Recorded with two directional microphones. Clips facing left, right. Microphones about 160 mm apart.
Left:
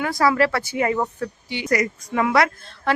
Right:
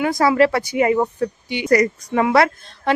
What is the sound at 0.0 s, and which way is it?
Speech, 20° right (ahead or behind).